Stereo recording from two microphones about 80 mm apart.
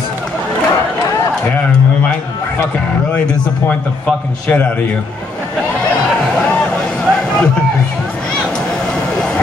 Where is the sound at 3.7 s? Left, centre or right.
Centre.